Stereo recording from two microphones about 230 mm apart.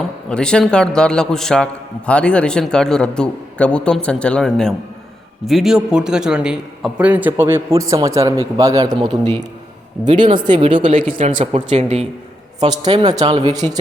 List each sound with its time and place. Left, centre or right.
0.3 s a man's voice: centre
10.2 s a man's voice: centre